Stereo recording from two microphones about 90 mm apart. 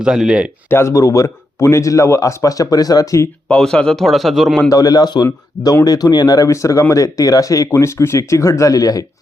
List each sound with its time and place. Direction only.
0.0 s speech: 10° right (ahead or behind)
0.7 s a man's voice: 30° left (ahead or behind)
3.5 s a man's voice: 10° left (ahead or behind)
4.7 s a man's voice: 45° left (ahead or behind)